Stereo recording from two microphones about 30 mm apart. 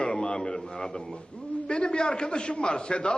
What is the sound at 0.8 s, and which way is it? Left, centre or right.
A man's voice, left.